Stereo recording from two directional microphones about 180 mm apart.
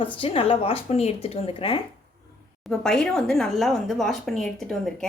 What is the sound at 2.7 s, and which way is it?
A woman's voice, centre (ahead or behind).